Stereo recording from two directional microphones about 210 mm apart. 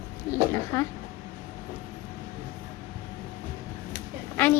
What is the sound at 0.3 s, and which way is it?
Speech, 15° left (ahead or behind).